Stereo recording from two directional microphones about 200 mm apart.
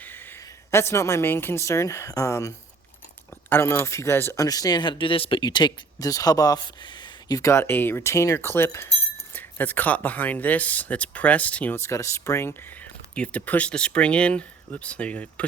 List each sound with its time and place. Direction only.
0.0 s a woman's voice: 10° left (ahead or behind)